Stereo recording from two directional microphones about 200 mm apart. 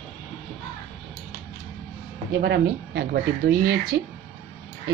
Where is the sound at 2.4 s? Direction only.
55° right (ahead or behind).